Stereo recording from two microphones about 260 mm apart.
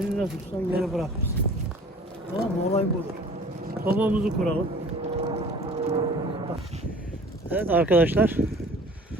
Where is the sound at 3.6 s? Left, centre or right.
Right.